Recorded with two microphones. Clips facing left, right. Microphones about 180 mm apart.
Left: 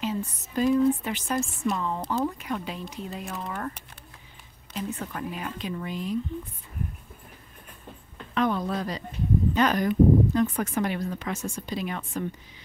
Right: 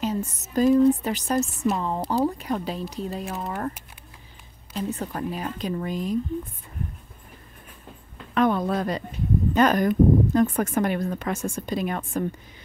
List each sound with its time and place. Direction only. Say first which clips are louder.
0.0 s speech: right 3 dB; 45° right (ahead or behind)
4.7 s speech: right 4 dB; 35° right (ahead or behind)
8.4 s speech: right 4 dB; 55° right (ahead or behind)